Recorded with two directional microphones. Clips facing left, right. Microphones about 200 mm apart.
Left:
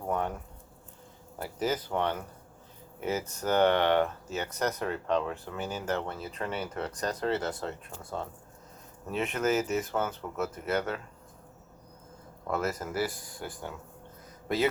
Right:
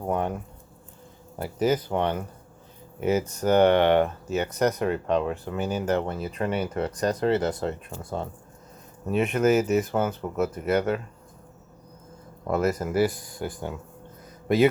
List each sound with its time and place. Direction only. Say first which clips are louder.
0.1 s a sound: right 4 dB; 15° right (ahead or behind)
1.4 s speech: right 7 dB; 15° right (ahead or behind)
9.1 s speech: right 7 dB; 15° right (ahead or behind)
12.5 s a man's voice: right 7 dB; 15° right (ahead or behind)